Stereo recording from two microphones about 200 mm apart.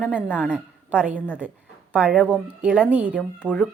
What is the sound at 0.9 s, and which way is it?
A woman's voice, 5° right (ahead or behind).